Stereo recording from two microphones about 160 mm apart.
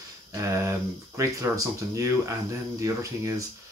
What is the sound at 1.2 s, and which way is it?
Speech, 20° right (ahead or behind).